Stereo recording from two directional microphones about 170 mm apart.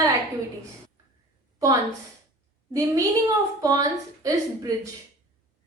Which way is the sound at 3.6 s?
20° right (ahead or behind).